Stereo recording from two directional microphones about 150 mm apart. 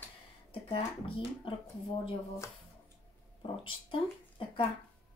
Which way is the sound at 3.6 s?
35° left (ahead or behind).